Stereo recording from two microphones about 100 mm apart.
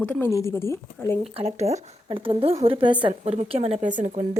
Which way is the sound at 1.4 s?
90° right.